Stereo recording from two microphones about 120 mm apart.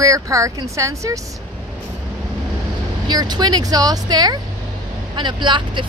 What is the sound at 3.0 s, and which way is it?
Speech, 35° right (ahead or behind).